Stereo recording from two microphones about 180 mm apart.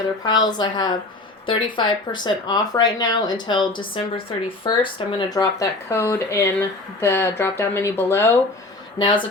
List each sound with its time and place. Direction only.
0.2 s speech: 25° left (ahead or behind)
9.0 s speech: 25° left (ahead or behind)